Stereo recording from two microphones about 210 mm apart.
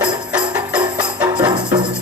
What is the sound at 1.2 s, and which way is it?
Music, 20° right (ahead or behind).